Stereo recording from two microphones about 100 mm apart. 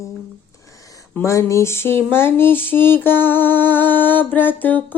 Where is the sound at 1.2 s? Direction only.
30° left (ahead or behind).